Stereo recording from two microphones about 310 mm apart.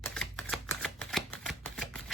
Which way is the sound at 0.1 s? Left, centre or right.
Centre.